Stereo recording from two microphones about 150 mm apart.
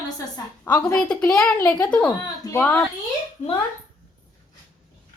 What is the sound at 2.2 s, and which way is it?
Speech, 25° left (ahead or behind).